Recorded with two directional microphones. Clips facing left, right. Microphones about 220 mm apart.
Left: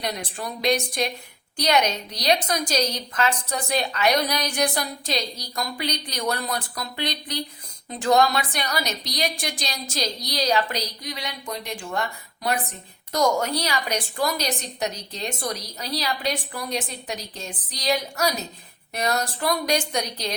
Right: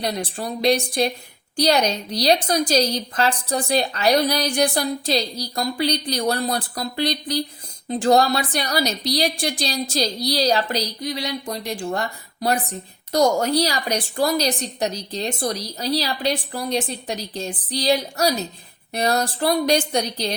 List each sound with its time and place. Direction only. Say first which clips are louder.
0.0 s a woman's voice: right 4 dB; 30° right (ahead or behind)